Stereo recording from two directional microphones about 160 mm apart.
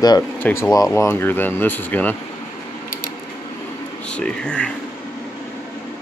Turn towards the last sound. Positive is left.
turn(degrees=5)  # may be behind; listen again after turning